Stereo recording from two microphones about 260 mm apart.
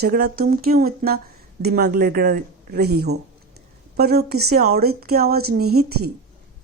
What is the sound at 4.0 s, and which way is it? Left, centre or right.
Speech, right.